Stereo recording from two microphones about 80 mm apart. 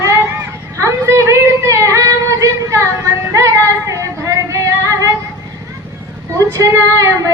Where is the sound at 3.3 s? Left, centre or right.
Right.